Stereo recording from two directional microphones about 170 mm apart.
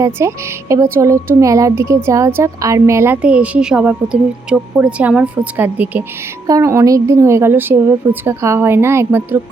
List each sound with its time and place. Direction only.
0.0 s a woman's voice: 15° right (ahead or behind)